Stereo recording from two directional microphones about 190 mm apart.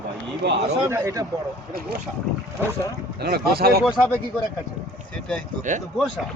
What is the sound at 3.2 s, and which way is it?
Speech, 55° right (ahead or behind).